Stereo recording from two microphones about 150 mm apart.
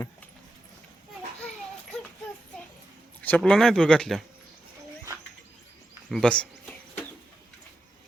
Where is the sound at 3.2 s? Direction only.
10° left (ahead or behind).